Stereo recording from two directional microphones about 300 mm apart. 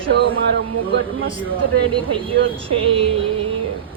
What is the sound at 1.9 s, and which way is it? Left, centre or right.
Speech, centre.